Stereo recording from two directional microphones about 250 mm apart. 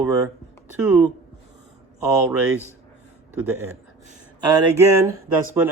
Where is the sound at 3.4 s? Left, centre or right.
Centre.